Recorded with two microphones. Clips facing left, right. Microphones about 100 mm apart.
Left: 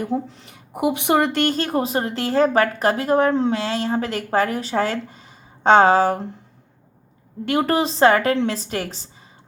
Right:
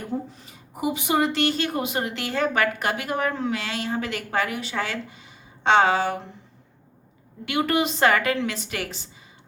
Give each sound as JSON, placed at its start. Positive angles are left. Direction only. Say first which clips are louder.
{"t": 0.3, "sound": "speech", "louder": "left 3 dB", "side_deg": 65}
{"t": 7.4, "sound": "speech", "louder": "left 4 dB", "side_deg": 40}